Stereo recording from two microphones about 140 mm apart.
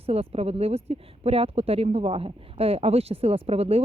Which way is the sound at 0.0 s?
45° right (ahead or behind).